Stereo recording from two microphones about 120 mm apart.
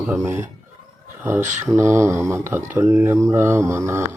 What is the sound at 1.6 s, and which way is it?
Mantra, 25° right (ahead or behind).